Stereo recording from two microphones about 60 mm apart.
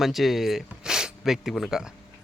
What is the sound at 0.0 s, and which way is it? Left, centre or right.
Speech, centre.